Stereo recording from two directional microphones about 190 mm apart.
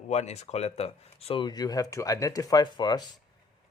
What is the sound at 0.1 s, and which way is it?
Speech, 35° left (ahead or behind).